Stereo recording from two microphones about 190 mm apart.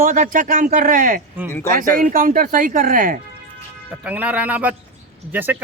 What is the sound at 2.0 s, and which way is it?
Speech, 45° right (ahead or behind).